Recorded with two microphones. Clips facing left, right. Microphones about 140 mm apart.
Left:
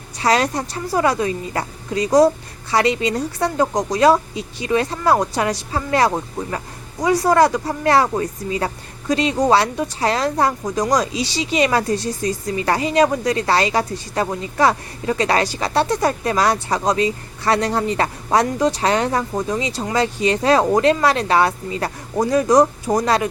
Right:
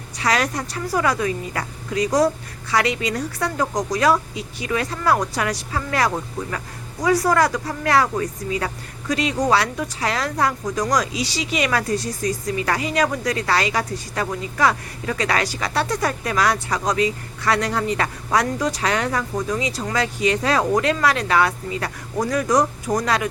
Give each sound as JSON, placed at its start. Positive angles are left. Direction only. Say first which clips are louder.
{"t": 0.2, "sound": "speech", "louder": "left 4 dB", "side_deg": 30}